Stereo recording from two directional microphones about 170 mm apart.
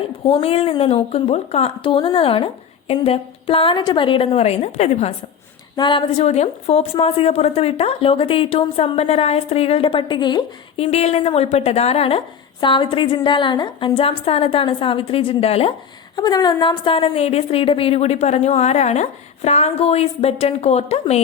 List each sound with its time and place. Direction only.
0.3 s a woman's voice: 35° left (ahead or behind)
5.7 s a woman's voice: 30° left (ahead or behind)
16.1 s a woman's voice: 25° left (ahead or behind); by 21.2 s 40° left (ahead or behind)